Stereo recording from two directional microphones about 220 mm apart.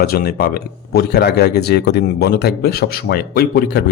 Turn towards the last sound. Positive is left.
turn(degrees=45)  # may be behind; listen again after turning